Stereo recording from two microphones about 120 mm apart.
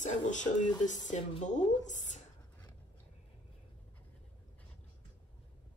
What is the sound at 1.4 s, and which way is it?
Speech, 85° left.